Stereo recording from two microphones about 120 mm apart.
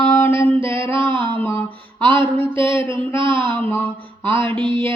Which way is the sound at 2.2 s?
45° right (ahead or behind).